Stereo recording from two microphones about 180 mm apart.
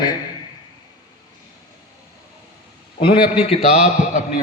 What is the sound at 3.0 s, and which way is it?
Speech, 25° left (ahead or behind).